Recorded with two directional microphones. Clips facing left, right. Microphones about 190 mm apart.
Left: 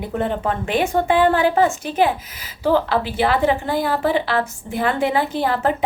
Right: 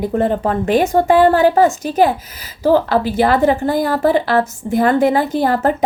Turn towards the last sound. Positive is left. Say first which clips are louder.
# right 4 dB
turn(degrees=-40)  # may be behind; listen again after turning